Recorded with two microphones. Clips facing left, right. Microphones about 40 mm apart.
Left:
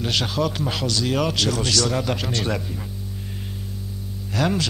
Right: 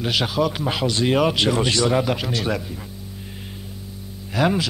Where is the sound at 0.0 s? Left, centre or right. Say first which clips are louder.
Right 2 dB; centre.